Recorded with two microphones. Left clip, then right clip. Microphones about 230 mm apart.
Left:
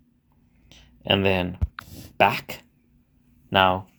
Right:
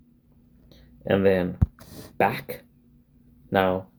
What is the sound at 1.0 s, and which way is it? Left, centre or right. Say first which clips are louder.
Speech: right 1 dB; left.